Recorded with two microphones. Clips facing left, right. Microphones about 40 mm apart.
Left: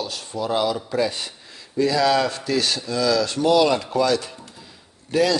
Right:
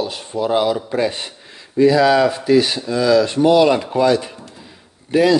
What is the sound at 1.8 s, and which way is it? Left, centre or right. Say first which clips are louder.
A man's voice: right 6 dB; right.